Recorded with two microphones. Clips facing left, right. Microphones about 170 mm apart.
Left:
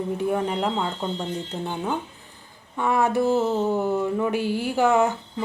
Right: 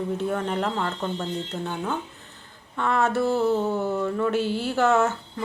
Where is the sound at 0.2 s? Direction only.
15° left (ahead or behind).